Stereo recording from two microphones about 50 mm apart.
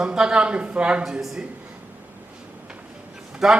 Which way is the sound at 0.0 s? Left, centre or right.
Centre.